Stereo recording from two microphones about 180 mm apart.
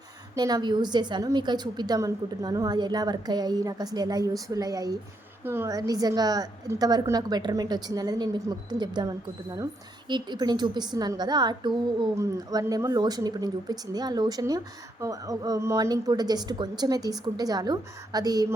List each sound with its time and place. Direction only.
0.3 s a woman's voice: 20° right (ahead or behind)